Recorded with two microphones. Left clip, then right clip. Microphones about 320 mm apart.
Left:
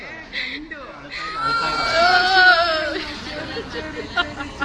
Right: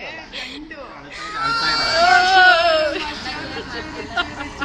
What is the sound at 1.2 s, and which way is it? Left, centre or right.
Baby cry, centre.